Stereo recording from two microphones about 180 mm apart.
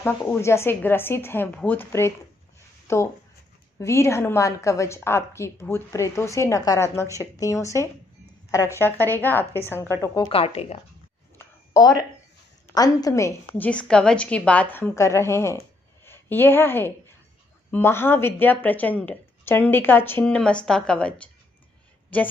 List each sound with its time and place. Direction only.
0.4 s a woman's voice: 15° left (ahead or behind); by 10.8 s 35° left (ahead or behind)
11.3 s a sound: 20° left (ahead or behind)
12.7 s a woman's voice: 20° left (ahead or behind)